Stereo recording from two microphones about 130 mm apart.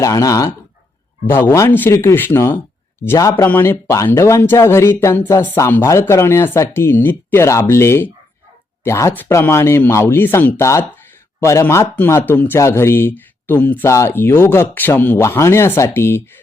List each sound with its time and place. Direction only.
0.0 s speech: 25° left (ahead or behind)